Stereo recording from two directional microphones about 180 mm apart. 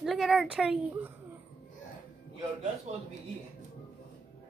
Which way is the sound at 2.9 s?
35° right (ahead or behind).